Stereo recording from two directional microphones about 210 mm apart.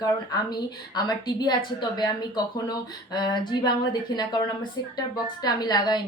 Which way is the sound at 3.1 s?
20° left (ahead or behind).